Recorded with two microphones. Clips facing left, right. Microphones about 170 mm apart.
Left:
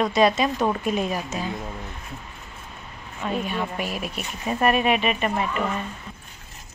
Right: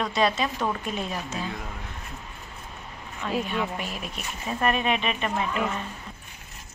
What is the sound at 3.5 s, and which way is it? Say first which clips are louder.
Speech: left 2 dB; 10° left (ahead or behind).